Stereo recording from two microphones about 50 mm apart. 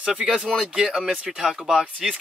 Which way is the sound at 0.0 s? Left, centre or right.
Centre.